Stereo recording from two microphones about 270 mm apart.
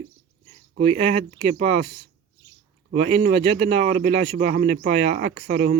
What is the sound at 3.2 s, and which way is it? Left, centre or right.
Speech, right.